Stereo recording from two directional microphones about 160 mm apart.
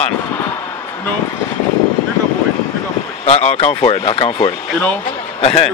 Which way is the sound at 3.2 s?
40° left (ahead or behind).